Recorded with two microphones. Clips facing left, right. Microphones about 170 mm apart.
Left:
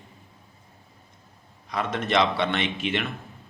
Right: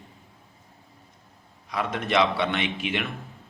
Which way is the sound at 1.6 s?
10° right (ahead or behind).